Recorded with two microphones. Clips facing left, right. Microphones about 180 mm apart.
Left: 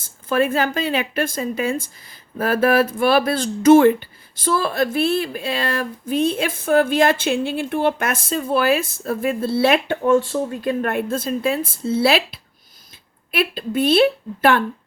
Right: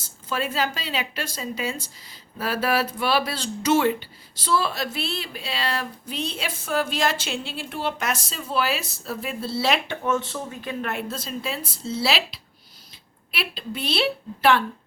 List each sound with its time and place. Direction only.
0.0 s speech: 55° left (ahead or behind)